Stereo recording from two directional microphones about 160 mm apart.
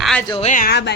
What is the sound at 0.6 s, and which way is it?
Speech, 90° left.